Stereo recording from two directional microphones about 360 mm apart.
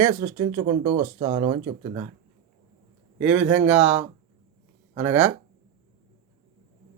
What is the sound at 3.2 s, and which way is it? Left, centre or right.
Speech, centre.